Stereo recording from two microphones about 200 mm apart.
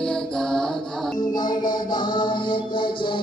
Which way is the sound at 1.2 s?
20° left (ahead or behind).